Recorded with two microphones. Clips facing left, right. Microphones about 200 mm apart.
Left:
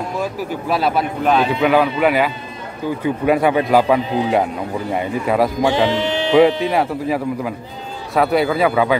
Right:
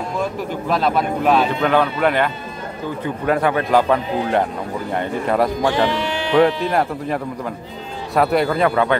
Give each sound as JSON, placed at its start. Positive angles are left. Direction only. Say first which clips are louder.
{"t": 0.2, "sound": "speech", "louder": "even", "side_deg": 5}
{"t": 5.9, "sound": "speech", "louder": "left 3 dB", "side_deg": 25}
{"t": 6.3, "sound": "speech", "louder": "left 2 dB", "side_deg": 5}